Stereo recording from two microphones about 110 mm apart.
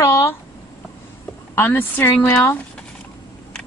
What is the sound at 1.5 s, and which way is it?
A woman's voice, 20° left (ahead or behind).